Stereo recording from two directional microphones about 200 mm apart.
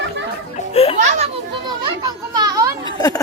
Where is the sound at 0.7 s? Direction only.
30° left (ahead or behind).